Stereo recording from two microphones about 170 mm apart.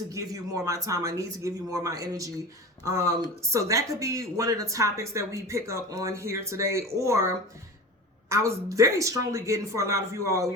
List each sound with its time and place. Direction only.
0.1 s speech: 20° right (ahead or behind)
8.3 s speech: 15° right (ahead or behind)